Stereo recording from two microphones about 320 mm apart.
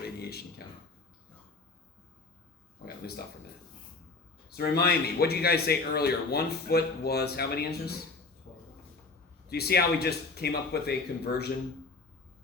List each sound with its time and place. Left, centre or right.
0.0 s a sound: left
4.5 s a man's voice: left
9.5 s a man's voice: left